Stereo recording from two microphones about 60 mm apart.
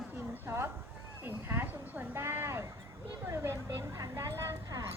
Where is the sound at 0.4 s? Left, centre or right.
Right.